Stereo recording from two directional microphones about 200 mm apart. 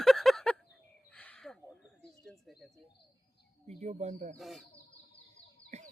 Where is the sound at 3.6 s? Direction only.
35° right (ahead or behind).